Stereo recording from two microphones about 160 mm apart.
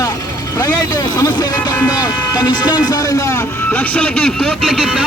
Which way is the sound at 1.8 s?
25° left (ahead or behind).